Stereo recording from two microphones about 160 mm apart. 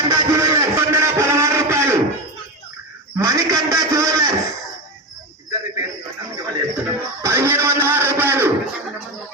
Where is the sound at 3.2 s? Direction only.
20° right (ahead or behind).